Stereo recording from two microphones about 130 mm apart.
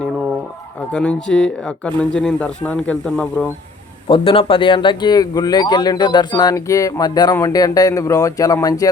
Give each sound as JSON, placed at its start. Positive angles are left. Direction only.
{"t": 0.9, "sound": "speech", "side_deg": 10}
{"t": 4.1, "sound": "speech", "side_deg": 45}